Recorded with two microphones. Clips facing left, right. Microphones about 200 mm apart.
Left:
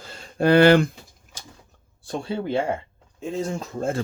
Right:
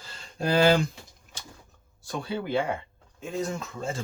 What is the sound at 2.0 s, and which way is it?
Speech, 30° left (ahead or behind).